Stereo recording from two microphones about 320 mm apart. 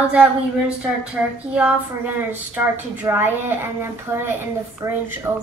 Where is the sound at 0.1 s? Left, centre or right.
Centre.